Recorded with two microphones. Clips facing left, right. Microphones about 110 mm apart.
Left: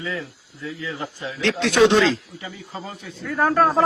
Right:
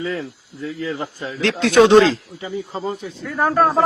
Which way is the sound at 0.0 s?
40° right (ahead or behind).